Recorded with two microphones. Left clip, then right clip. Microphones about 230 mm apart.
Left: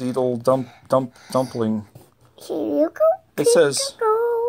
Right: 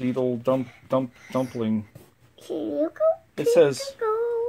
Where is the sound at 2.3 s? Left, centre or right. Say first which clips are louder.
Left 6 dB; left.